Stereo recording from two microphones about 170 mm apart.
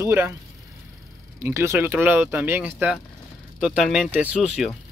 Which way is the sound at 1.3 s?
15° right (ahead or behind).